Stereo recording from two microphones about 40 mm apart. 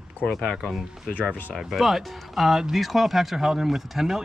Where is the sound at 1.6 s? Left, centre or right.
Centre.